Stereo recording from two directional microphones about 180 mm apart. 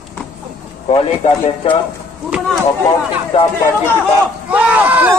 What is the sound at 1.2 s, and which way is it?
Speech, 40° left (ahead or behind).